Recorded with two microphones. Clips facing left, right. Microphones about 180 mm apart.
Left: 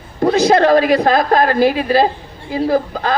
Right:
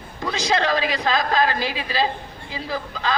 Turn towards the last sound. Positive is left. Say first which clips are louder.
# left 10 dB
turn(degrees=50)  # may be behind; listen again after turning